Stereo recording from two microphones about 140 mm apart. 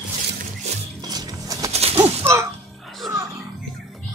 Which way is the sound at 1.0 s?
30° right (ahead or behind).